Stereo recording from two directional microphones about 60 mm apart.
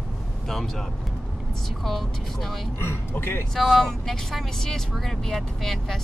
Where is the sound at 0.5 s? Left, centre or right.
Centre.